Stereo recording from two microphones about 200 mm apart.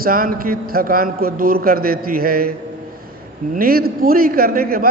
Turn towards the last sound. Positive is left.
turn(degrees=-50)  # may be behind; listen again after turning